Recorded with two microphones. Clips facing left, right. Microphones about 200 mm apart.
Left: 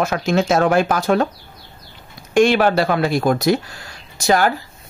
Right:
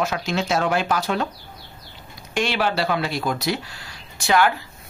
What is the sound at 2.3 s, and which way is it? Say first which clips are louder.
Speech: left 9 dB; 50° left (ahead or behind).